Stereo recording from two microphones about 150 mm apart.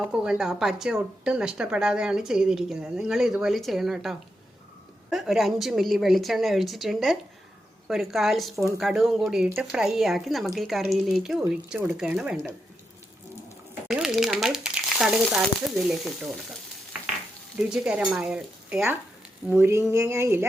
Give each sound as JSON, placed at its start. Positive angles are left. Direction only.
{"t": 0.1, "sound": "speech", "side_deg": -5}
{"t": 13.8, "sound": "speech", "side_deg": -5}
{"t": 17.6, "sound": "speech", "side_deg": -5}